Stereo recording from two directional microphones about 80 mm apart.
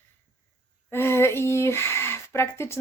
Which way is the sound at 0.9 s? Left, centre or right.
Left.